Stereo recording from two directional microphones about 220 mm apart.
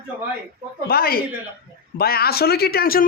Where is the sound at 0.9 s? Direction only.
45° left (ahead or behind).